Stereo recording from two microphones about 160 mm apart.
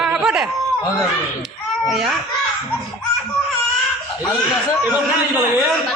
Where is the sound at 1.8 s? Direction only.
Centre (ahead or behind).